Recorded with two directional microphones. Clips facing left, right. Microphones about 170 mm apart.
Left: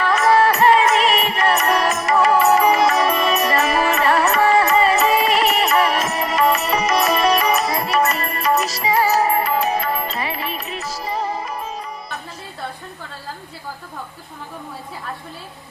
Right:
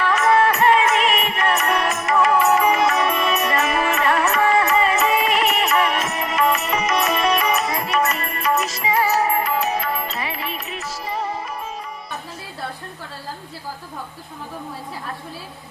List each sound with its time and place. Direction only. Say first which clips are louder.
0.0 s music: left 2 dB; 35° left (ahead or behind)